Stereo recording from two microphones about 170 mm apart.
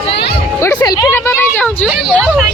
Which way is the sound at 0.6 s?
15° left (ahead or behind).